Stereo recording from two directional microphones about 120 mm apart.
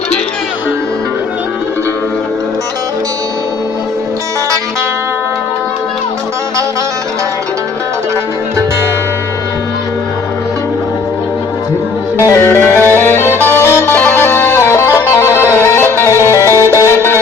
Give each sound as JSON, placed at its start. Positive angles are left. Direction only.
{"t": 12.2, "sound": "music", "side_deg": 20}